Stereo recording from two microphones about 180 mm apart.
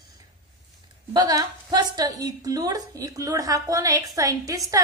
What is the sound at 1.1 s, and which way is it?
A woman's voice, 25° right (ahead or behind).